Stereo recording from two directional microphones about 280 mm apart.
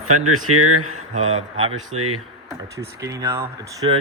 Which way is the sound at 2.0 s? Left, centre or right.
Right.